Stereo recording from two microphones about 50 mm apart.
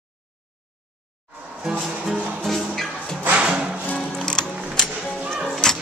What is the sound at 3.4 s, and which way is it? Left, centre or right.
Music, centre.